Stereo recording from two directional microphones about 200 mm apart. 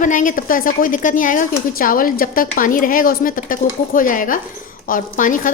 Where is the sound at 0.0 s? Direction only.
40° left (ahead or behind).